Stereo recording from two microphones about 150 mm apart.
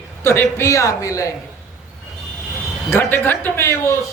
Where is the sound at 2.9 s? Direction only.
15° left (ahead or behind).